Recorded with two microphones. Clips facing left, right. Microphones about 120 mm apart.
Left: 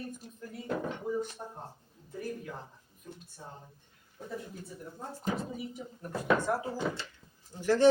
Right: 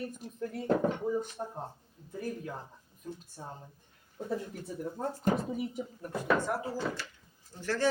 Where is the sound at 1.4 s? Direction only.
35° right (ahead or behind).